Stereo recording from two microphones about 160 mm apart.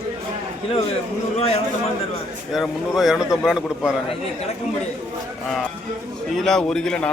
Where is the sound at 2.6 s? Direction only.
Centre (ahead or behind).